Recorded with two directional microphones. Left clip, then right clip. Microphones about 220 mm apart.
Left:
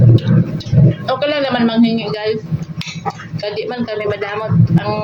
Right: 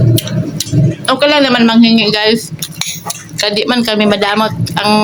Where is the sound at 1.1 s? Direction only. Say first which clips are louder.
Right 8 dB; 50° right (ahead or behind).